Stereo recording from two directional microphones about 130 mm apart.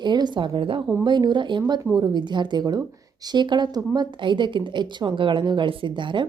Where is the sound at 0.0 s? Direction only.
35° right (ahead or behind).